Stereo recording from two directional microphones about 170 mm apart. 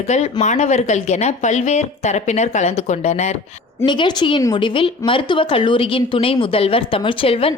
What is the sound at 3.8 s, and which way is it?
A woman's voice, 25° left (ahead or behind).